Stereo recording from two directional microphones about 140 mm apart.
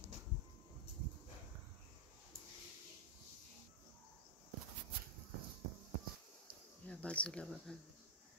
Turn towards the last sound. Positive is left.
turn(degrees=5)  # may be behind; listen again after turning